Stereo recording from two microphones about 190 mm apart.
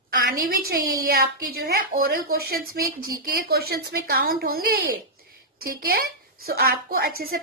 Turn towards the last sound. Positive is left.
turn(degrees=-50)  # may be behind; listen again after turning